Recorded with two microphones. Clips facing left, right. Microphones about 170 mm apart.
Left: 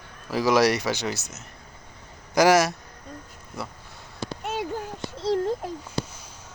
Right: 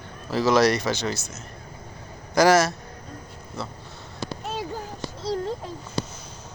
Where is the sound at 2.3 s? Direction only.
15° left (ahead or behind).